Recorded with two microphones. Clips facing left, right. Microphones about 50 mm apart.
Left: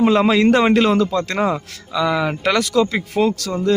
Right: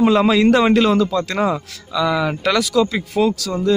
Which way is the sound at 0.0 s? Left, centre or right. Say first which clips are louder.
Even; left.